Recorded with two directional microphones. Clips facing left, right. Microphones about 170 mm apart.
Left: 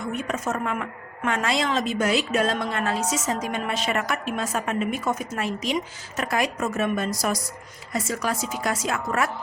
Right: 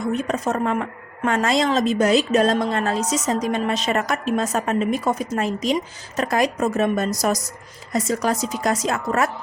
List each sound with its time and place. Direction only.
0.3 s a woman's voice: 35° right (ahead or behind)